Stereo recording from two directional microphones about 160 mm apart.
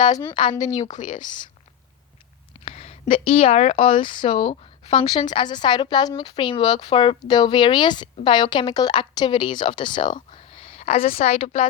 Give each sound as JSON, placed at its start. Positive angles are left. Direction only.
{"t": 0.5, "sound": "a woman's voice", "side_deg": 25}
{"t": 0.8, "sound": "speech", "side_deg": 50}
{"t": 1.2, "sound": "a woman's voice", "side_deg": 30}
{"t": 2.6, "sound": "a woman's voice", "side_deg": 40}